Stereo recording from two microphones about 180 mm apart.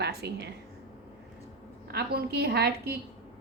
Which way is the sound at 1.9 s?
60° right (ahead or behind).